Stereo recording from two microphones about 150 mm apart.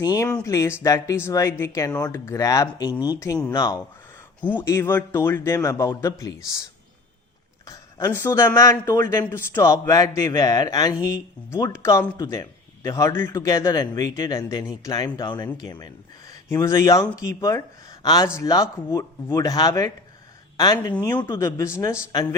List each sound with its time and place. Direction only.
0.0 s a man's voice: 25° left (ahead or behind)
7.7 s a man's voice: 20° left (ahead or behind)